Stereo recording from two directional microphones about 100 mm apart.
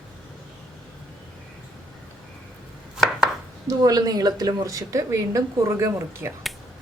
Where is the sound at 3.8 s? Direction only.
40° right (ahead or behind).